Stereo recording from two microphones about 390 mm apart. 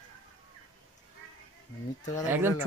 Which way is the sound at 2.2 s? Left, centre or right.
Centre.